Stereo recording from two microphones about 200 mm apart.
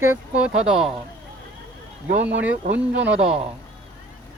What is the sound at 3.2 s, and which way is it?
Speech, 30° right (ahead or behind).